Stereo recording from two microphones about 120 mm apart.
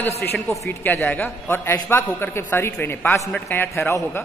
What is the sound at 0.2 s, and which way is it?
A man's voice, 20° left (ahead or behind).